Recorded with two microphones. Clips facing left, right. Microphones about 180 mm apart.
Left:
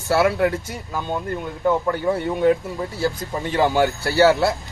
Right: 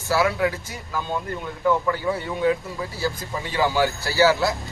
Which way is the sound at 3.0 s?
55° left (ahead or behind).